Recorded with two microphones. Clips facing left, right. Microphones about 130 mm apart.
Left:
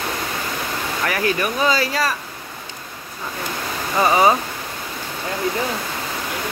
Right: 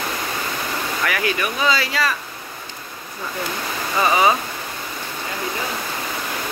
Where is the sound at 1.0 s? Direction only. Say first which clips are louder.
Left 3 dB; 35° left (ahead or behind).